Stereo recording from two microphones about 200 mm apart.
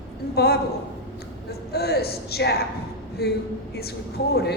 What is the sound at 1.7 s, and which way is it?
Speech, 50° left (ahead or behind).